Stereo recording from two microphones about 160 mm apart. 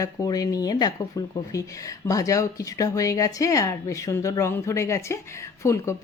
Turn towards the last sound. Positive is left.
turn(degrees=20)  # may be behind; listen again after turning